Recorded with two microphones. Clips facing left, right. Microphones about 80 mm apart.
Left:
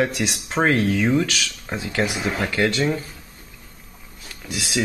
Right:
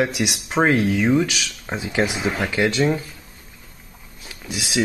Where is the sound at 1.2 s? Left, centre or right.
Centre.